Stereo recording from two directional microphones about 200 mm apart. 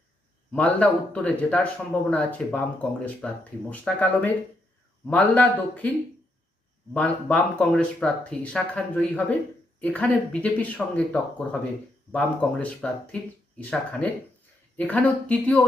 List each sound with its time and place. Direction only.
0.5 s speech: 5° left (ahead or behind)
6.9 s speech: 5° left (ahead or behind)